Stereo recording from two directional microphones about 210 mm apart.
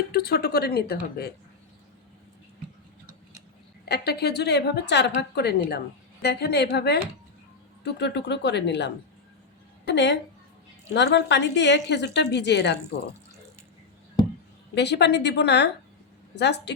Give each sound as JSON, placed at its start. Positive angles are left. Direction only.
{"t": 0.1, "sound": "a woman's voice", "side_deg": 50}
{"t": 3.8, "sound": "a woman's voice", "side_deg": 50}
{"t": 14.8, "sound": "a woman's voice", "side_deg": 55}